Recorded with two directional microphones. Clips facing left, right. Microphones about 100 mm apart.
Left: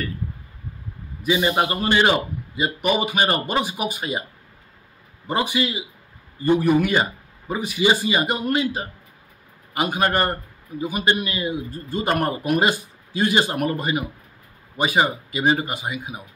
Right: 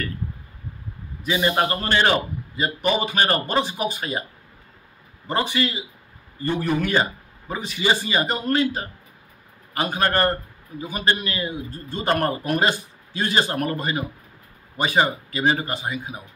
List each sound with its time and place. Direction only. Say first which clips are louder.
1.2 s a man's voice: left 1 dB; 10° left (ahead or behind)
5.2 s a man's voice: left 1 dB; 15° left (ahead or behind)